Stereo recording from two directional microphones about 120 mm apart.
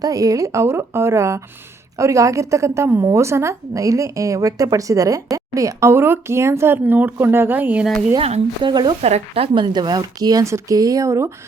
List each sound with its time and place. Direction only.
0.0 s a woman's voice: 30° right (ahead or behind); by 7.9 s 15° right (ahead or behind)
8.6 s speech: 40° right (ahead or behind)
9.0 s speech: 65° right (ahead or behind); by 11.3 s 25° right (ahead or behind)